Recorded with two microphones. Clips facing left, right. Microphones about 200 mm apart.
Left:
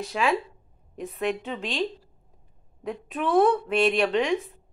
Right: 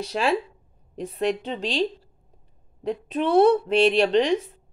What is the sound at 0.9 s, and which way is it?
A woman's voice, 30° right (ahead or behind).